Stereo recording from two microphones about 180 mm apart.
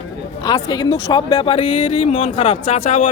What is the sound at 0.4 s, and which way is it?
Speech, 20° left (ahead or behind).